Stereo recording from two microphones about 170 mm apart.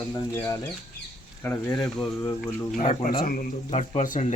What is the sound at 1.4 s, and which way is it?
Speech, 10° left (ahead or behind).